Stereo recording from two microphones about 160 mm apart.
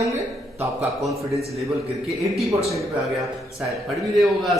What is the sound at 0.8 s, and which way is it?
Speech, centre (ahead or behind).